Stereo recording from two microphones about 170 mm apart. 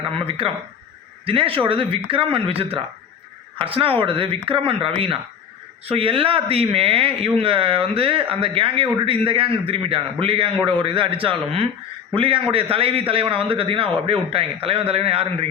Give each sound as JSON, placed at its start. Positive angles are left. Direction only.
{"t": 0.4, "sound": "speech", "side_deg": -30}